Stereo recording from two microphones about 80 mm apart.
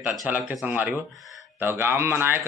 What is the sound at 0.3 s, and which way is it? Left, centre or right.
A man's voice, centre.